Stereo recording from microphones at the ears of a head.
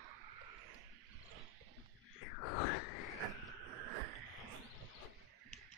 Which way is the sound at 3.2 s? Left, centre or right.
Right.